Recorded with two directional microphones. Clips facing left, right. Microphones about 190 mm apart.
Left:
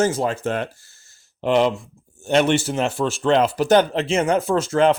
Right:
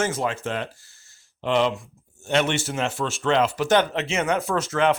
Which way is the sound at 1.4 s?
45° left (ahead or behind).